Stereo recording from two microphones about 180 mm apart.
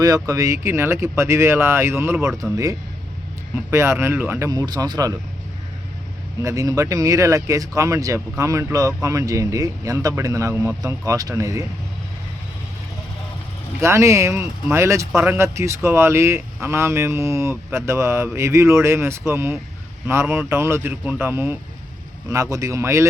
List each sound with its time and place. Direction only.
0.0 s speech: 20° right (ahead or behind)
6.4 s speech: 20° right (ahead or behind)
13.8 s speech: 15° right (ahead or behind)